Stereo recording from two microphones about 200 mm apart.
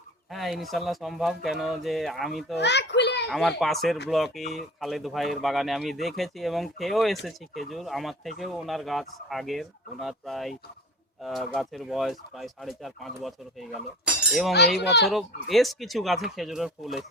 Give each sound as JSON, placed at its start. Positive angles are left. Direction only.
{"t": 0.3, "sound": "speech", "side_deg": 0}
{"t": 2.6, "sound": "a child's voice", "side_deg": 60}
{"t": 3.2, "sound": "speech", "side_deg": 0}
{"t": 14.8, "sound": "a child's voice", "side_deg": 55}
{"t": 15.0, "sound": "speech", "side_deg": 0}